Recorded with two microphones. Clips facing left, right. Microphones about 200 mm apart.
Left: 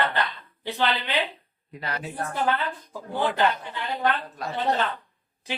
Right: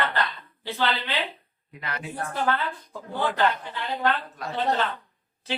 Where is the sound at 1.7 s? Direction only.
35° left (ahead or behind).